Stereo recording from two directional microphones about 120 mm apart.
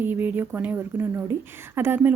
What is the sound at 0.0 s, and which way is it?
Speech, 15° right (ahead or behind).